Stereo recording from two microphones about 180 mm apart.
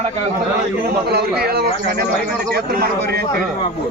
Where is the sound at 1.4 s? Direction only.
60° right (ahead or behind).